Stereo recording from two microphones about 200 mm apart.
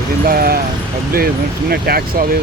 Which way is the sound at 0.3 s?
45° right (ahead or behind).